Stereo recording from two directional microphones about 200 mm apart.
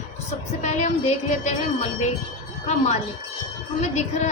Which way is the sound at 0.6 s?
35° left (ahead or behind).